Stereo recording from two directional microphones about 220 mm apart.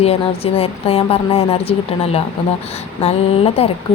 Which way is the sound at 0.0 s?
25° left (ahead or behind).